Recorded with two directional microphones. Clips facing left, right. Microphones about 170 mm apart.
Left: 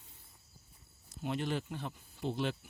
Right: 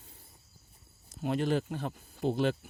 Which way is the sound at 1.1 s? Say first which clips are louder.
Right 6 dB; 45° right (ahead or behind).